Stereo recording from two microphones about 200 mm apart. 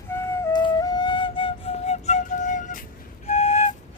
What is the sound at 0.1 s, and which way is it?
Flute, 10° left (ahead or behind).